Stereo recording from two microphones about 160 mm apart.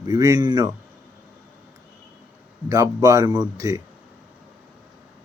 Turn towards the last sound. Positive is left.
turn(degrees=-20)  # may be behind; listen again after turning